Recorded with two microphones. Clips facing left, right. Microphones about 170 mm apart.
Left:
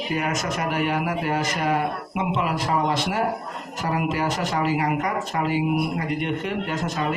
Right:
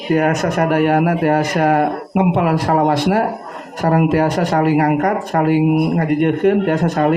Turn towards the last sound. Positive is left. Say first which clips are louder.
# right 11 dB
turn(degrees=-60)  # may be behind; listen again after turning